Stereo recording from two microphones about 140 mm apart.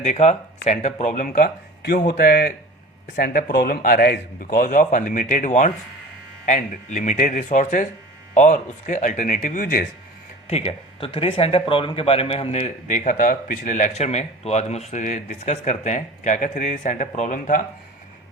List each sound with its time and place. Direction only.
0.0 s speech: 50° left (ahead or behind); by 1.5 s 75° left (ahead or behind)
2.2 s a man's voice: 90° left
10.4 s speech: 45° left (ahead or behind)
13.1 s speech: 75° left (ahead or behind)